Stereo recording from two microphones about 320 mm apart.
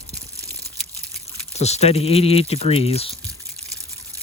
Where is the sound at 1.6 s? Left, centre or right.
Centre.